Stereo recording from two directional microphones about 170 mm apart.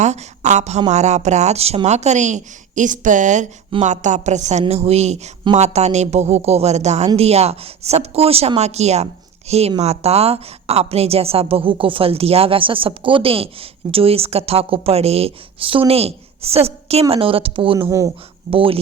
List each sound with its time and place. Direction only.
0.0 s a woman's voice: 45° right (ahead or behind)
17.8 s speech: 20° right (ahead or behind)
18.5 s a woman's voice: 30° right (ahead or behind)